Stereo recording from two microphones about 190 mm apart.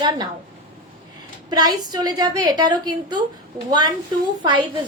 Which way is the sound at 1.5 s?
20° right (ahead or behind).